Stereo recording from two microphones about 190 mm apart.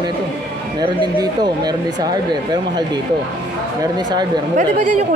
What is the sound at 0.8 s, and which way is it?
Speech, 20° right (ahead or behind).